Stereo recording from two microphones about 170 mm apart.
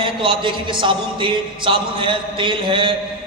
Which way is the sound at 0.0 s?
30° right (ahead or behind).